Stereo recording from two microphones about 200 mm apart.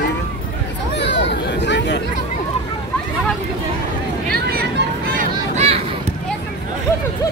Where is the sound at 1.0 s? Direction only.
60° left (ahead or behind).